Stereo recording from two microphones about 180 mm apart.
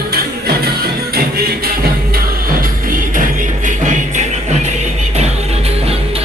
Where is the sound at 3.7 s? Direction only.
45° right (ahead or behind).